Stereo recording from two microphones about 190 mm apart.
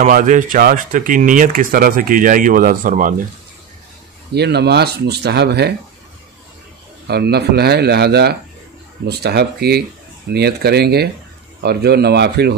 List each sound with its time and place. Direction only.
0.0 s speech: 40° right (ahead or behind)
4.3 s speech: 60° right (ahead or behind)
7.1 s speech: 55° right (ahead or behind)